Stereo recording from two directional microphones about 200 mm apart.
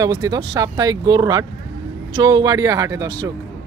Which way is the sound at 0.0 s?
20° right (ahead or behind).